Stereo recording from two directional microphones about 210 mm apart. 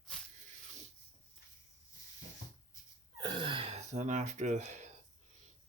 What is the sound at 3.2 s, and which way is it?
Gasp, 20° right (ahead or behind).